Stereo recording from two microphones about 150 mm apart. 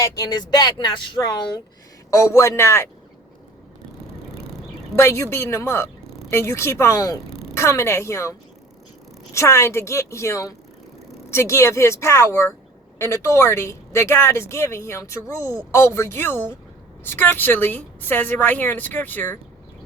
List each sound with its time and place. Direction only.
0.0 s speech: 25° left (ahead or behind)
4.9 s a woman's voice: 20° left (ahead or behind)